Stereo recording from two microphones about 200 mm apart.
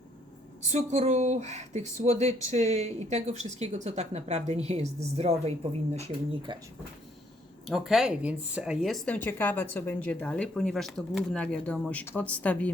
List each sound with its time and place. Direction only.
0.7 s a woman's voice: 35° right (ahead or behind)
7.7 s speech: centre (ahead or behind)